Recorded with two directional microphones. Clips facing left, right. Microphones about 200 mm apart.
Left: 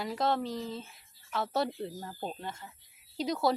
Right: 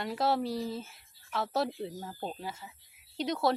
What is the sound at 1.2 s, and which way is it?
Speech, centre (ahead or behind).